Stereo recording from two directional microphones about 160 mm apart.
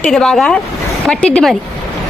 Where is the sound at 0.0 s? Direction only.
5° left (ahead or behind).